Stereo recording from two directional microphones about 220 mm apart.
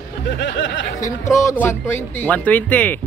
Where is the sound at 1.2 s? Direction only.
15° left (ahead or behind).